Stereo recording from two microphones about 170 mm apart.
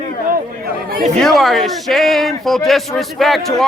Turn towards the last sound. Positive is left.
turn(degrees=0)  # may be behind; listen again after turning